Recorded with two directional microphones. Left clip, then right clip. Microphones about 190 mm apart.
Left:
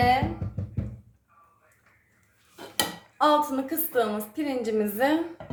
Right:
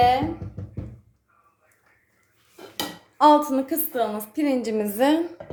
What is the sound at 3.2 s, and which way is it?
A woman's voice, 25° right (ahead or behind).